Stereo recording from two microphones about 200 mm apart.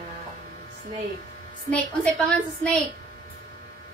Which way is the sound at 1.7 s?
5° left (ahead or behind).